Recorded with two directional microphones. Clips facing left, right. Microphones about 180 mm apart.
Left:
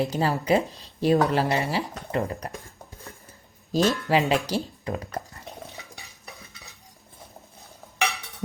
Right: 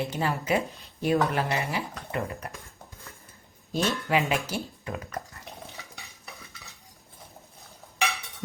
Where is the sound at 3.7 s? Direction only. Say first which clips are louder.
Left 4 dB; 35° left (ahead or behind).